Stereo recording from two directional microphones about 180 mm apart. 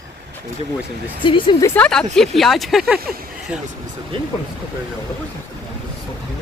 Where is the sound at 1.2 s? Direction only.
25° left (ahead or behind).